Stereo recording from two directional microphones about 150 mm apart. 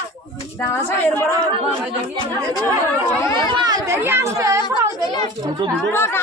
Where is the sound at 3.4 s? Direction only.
30° right (ahead or behind).